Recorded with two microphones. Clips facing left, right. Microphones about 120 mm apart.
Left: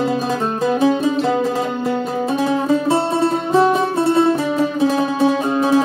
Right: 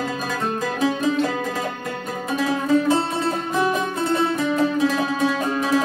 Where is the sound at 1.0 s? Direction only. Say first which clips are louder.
Left 4 dB; 30° left (ahead or behind).